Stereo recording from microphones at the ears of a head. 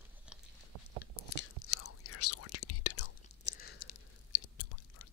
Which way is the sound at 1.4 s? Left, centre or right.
Left.